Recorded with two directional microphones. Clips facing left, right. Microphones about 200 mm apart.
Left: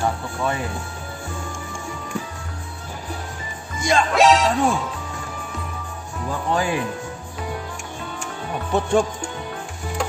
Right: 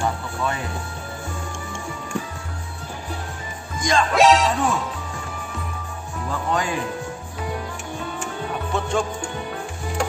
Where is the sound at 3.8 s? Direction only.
Centre (ahead or behind).